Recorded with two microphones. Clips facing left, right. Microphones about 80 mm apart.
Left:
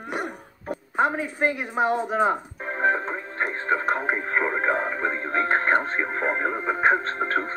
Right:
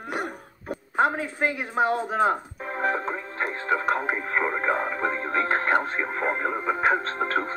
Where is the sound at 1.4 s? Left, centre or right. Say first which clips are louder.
Left 1 dB; left.